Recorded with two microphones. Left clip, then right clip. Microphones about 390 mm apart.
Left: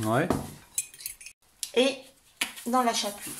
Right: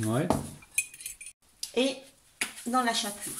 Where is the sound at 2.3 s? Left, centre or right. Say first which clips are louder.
Left 2 dB; centre.